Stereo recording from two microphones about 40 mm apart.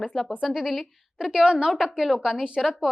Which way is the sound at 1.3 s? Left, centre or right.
Centre.